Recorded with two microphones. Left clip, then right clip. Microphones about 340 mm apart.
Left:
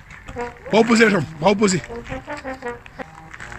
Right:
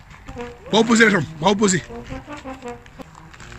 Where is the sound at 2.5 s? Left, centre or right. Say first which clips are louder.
Left 3 dB; left.